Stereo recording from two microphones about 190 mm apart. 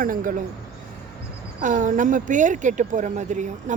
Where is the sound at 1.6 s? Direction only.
40° right (ahead or behind).